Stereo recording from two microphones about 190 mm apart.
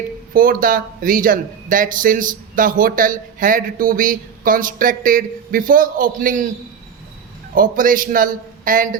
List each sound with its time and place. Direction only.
0.3 s speech: 50° right (ahead or behind)
7.5 s speech: 45° right (ahead or behind)